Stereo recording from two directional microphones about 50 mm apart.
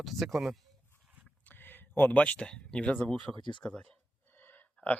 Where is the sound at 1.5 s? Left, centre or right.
Left.